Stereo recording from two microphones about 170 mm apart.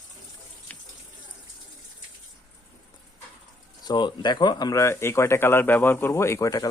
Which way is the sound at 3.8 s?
25° left (ahead or behind).